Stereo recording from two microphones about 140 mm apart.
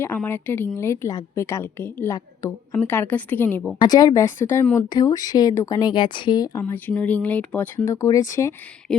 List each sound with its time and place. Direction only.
0.2 s speech: 15° left (ahead or behind)
3.8 s speech: 30° left (ahead or behind)
4.9 s speech: 25° left (ahead or behind)
6.6 s speech: 15° left (ahead or behind)
8.9 s a sound: 5° left (ahead or behind)